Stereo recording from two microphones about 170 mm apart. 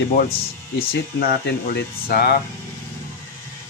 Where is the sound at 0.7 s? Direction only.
65° left (ahead or behind).